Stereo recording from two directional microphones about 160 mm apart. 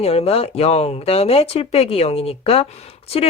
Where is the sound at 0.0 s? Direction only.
40° left (ahead or behind).